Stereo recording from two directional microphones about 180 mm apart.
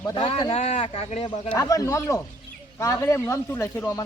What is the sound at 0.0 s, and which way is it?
A man's voice, 30° left (ahead or behind).